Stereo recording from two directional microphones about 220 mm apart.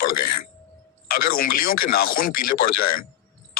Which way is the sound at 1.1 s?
45° left (ahead or behind).